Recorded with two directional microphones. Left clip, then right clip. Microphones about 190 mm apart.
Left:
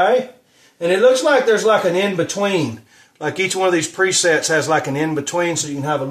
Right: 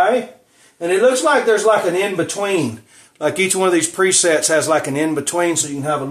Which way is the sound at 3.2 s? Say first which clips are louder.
Right 2 dB; 20° right (ahead or behind).